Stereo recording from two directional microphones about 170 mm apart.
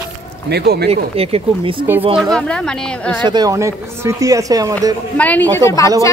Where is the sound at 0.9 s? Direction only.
35° right (ahead or behind).